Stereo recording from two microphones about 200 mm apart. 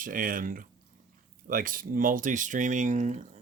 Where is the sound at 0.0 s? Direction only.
45° right (ahead or behind).